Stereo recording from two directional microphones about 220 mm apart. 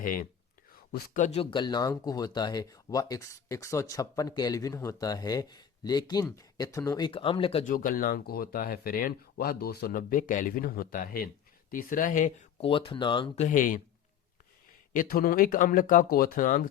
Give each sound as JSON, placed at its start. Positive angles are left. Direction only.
{"t": 0.0, "sound": "speech", "side_deg": 40}
{"t": 7.6, "sound": "speech", "side_deg": 35}
{"t": 14.9, "sound": "speech", "side_deg": 40}